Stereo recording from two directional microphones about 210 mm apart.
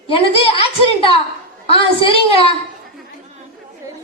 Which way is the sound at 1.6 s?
25° left (ahead or behind).